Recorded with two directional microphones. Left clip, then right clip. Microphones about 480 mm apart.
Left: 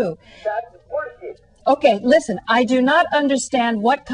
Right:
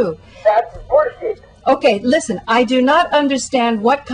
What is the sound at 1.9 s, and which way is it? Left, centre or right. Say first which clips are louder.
A woman's voice: even; left.